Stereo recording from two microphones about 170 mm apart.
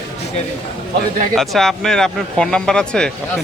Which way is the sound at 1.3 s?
Centre (ahead or behind).